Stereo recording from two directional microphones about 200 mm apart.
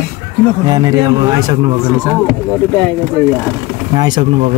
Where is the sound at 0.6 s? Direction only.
20° right (ahead or behind).